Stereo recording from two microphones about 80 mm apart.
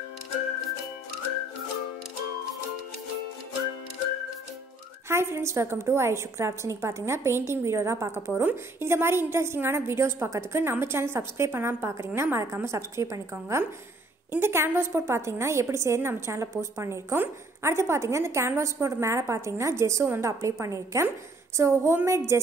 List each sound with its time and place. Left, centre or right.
5.0 s a woman's voice: right
8.3 s a woman's voice: right